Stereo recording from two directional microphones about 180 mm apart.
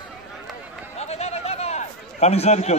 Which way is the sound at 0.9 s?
35° left (ahead or behind).